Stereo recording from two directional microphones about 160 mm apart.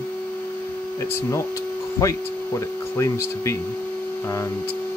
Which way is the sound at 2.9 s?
20° left (ahead or behind).